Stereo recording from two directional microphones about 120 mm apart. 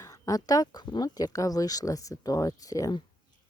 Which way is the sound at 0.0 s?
30° left (ahead or behind).